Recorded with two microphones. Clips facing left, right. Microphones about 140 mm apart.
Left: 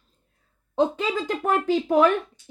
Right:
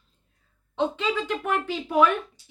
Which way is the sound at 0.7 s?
40° left (ahead or behind).